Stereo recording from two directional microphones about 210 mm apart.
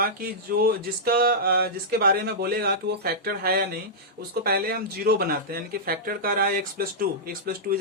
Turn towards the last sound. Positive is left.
turn(degrees=-45)  # may be behind; listen again after turning